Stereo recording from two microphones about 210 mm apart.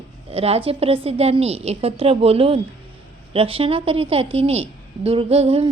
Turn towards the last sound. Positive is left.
turn(degrees=-30)  # may be behind; listen again after turning